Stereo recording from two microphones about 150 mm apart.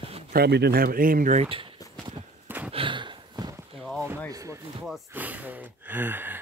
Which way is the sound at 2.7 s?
35° right (ahead or behind).